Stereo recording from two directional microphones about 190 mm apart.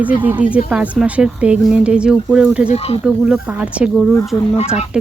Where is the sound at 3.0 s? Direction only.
5° right (ahead or behind).